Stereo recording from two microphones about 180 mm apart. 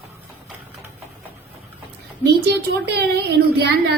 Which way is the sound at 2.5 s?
70° right (ahead or behind).